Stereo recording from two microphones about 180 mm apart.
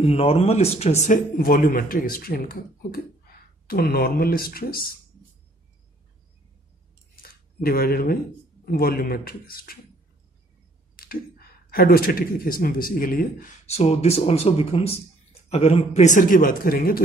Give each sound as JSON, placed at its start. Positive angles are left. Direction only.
{"t": 0.0, "sound": "speech", "side_deg": 35}
{"t": 1.4, "sound": "speech", "side_deg": 55}
{"t": 7.2, "sound": "a sound", "side_deg": 55}
{"t": 8.6, "sound": "speech", "side_deg": 55}
{"t": 11.0, "sound": "speech", "side_deg": 55}